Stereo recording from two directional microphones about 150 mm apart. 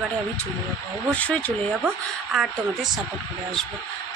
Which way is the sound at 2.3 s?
5° right (ahead or behind).